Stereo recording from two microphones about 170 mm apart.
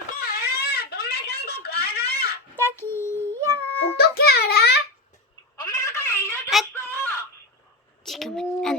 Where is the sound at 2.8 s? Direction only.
15° left (ahead or behind).